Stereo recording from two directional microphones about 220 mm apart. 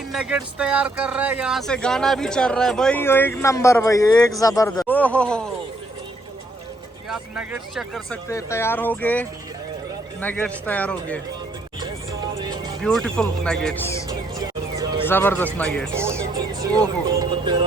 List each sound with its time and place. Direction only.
0.1 s speech: centre (ahead or behind)
7.1 s speech: 5° right (ahead or behind)
8.3 s speech: 15° left (ahead or behind)
11.8 s music: 20° right (ahead or behind)
12.8 s speech: 5° left (ahead or behind)
14.1 s music: 15° right (ahead or behind)
15.0 s speech: 10° left (ahead or behind)
17.2 s speech: 20° right (ahead or behind)